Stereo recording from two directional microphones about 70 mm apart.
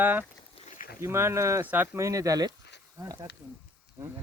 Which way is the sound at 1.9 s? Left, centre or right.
Right.